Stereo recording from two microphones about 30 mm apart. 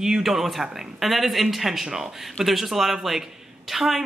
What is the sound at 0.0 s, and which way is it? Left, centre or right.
Speech, centre.